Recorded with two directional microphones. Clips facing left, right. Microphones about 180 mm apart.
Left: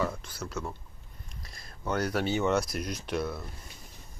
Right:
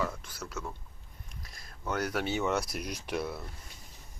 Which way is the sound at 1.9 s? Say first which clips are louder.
Left 3 dB; 5° right (ahead or behind).